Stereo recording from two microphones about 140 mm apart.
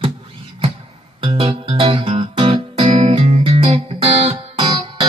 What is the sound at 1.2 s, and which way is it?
Music, 35° right (ahead or behind).